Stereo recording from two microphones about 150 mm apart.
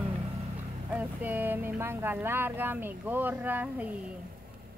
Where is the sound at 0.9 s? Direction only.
10° right (ahead or behind).